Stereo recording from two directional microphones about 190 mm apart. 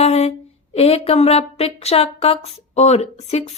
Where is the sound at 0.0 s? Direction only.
35° left (ahead or behind).